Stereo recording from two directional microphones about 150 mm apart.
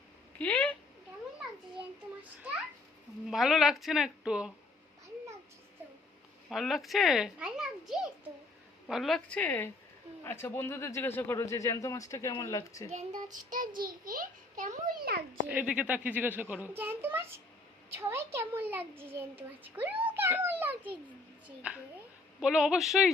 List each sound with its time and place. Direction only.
0.3 s a sound: 10° left (ahead or behind)
3.2 s a child's voice: centre (ahead or behind)
6.5 s a child's voice: centre (ahead or behind); by 12.9 s 20° left (ahead or behind)
12.9 s a child's voice: 50° right (ahead or behind); by 15.2 s 80° right
15.4 s a child's voice: 10° right (ahead or behind)